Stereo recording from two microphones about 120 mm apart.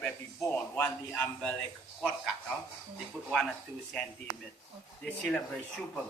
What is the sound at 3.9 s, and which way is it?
Speech, 5° left (ahead or behind).